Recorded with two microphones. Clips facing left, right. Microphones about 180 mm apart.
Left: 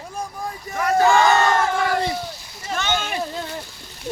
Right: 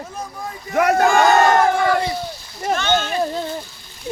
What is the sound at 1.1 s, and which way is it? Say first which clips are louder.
Crowd: right 3 dB; 55° right (ahead or behind).